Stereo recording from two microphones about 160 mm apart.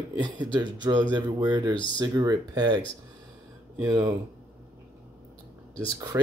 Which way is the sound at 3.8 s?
25° right (ahead or behind).